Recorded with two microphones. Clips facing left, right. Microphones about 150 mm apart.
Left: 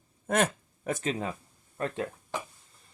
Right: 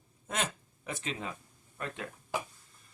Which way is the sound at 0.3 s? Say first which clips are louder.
Left 9 dB; 55° left (ahead or behind).